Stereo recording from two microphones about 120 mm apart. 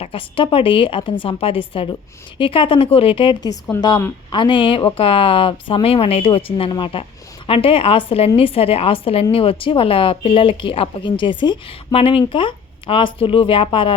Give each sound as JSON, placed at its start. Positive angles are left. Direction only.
{"t": 0.0, "sound": "a woman's voice", "side_deg": 45}